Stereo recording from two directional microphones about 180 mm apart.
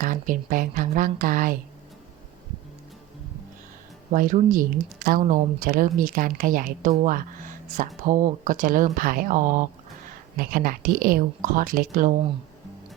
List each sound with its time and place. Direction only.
0.0 s speech: 50° right (ahead or behind)
4.1 s speech: 45° right (ahead or behind)